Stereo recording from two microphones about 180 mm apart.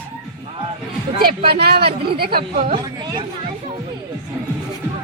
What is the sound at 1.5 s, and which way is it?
Speech, 60° right (ahead or behind).